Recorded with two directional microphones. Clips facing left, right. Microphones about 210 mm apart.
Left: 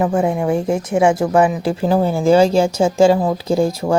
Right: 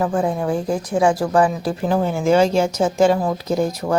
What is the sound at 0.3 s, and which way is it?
Speech, 20° left (ahead or behind).